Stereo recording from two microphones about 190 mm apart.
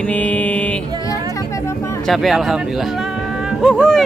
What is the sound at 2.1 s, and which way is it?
Speech, centre (ahead or behind).